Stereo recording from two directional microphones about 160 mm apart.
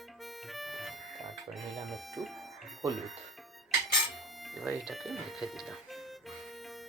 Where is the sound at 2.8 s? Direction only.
20° right (ahead or behind).